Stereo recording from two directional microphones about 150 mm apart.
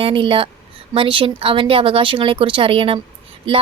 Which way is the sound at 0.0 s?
35° right (ahead or behind).